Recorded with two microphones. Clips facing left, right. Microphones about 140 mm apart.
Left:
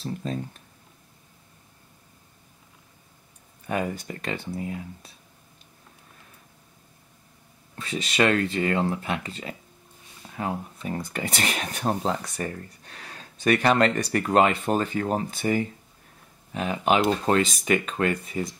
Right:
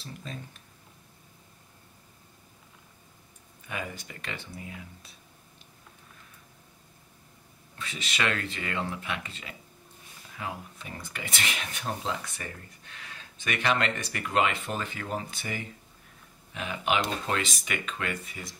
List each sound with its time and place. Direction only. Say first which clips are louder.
0.0 s speech: left 11 dB; 40° left (ahead or behind)
3.6 s speech: left 9 dB; 40° left (ahead or behind)
7.7 s speech: left 9 dB; 40° left (ahead or behind)